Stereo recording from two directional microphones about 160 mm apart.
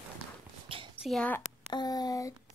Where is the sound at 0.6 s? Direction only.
35° right (ahead or behind).